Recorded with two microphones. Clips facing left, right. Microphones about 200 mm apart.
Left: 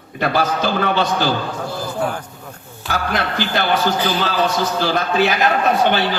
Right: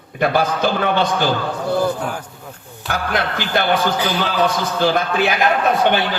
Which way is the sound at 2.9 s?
55° right (ahead or behind).